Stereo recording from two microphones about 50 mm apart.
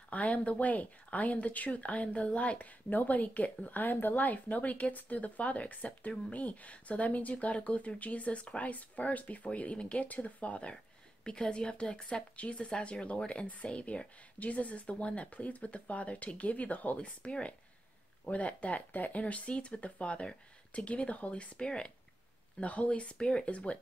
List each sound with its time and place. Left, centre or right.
0.1 s speech: left